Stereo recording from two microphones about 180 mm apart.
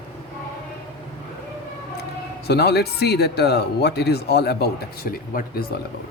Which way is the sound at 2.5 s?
65° left (ahead or behind).